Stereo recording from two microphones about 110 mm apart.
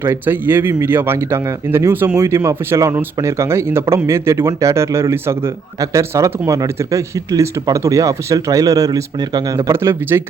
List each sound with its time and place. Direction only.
0.0 s speech: 20° right (ahead or behind)